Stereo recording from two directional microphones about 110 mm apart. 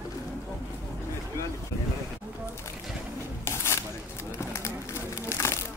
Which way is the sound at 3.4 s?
25° left (ahead or behind).